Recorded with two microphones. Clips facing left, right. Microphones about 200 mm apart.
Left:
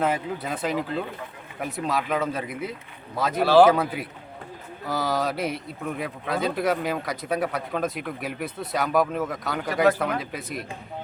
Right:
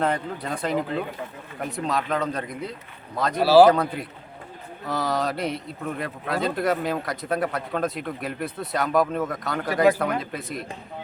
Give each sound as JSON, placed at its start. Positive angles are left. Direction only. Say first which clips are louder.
{"t": 0.0, "sound": "a man's voice", "louder": "even", "side_deg": 5}